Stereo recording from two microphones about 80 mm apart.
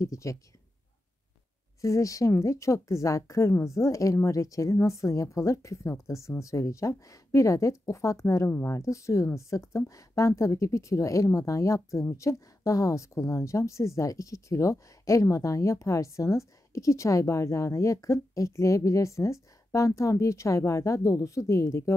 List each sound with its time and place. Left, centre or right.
0.0 s speech: left
1.8 s speech: left